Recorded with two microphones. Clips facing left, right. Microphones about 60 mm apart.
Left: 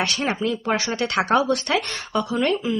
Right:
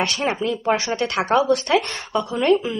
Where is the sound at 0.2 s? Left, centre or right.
Centre.